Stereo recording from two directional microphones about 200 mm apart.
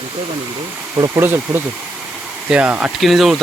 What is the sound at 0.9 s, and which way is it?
Speech, 15° right (ahead or behind).